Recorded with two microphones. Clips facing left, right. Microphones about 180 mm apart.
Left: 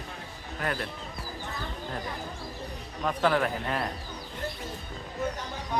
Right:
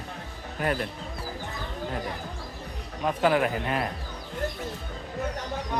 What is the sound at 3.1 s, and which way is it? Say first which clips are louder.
Speech: right 2 dB; 10° right (ahead or behind).